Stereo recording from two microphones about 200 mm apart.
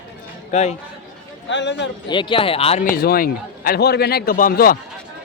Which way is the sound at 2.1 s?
25° left (ahead or behind).